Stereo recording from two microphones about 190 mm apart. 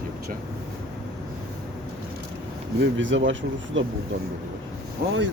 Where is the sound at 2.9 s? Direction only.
75° right (ahead or behind).